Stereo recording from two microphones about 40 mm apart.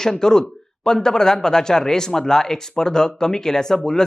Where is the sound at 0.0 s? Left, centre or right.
Centre.